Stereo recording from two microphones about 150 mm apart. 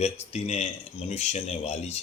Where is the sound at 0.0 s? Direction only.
45° left (ahead or behind).